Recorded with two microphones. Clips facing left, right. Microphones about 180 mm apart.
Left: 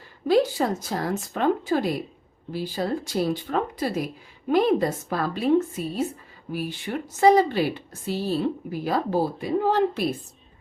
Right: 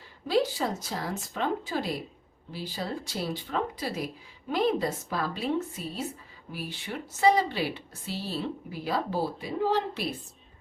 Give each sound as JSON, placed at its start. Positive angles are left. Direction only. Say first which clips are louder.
{"t": 0.3, "sound": "a woman's voice", "louder": "left 6 dB", "side_deg": 50}